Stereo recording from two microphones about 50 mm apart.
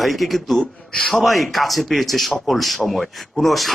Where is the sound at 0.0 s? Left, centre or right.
Centre.